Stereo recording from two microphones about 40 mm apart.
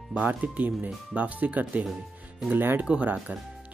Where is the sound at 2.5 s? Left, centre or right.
Right.